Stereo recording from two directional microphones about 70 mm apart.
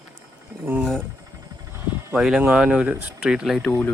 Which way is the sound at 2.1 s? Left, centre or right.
Centre.